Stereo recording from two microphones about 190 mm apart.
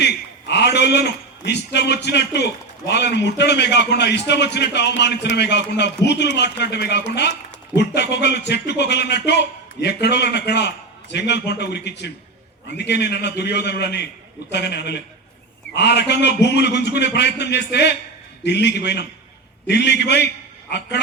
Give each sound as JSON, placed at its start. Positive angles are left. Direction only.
{"t": 0.0, "sound": "a man's voice", "side_deg": 65}